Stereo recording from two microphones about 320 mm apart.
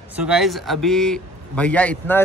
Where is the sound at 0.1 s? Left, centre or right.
Centre.